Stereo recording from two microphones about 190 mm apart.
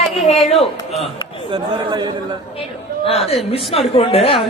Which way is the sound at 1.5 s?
25° right (ahead or behind).